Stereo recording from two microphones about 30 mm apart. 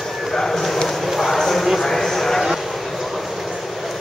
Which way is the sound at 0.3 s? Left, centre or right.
Centre.